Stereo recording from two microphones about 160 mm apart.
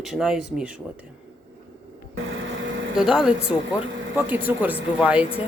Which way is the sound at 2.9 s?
5° right (ahead or behind).